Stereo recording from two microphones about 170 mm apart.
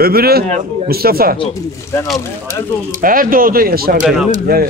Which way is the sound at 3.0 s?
55° right (ahead or behind).